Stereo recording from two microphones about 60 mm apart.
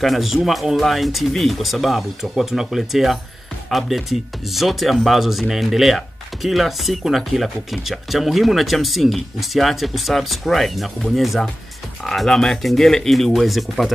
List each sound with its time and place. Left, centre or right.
0.0 s speech: centre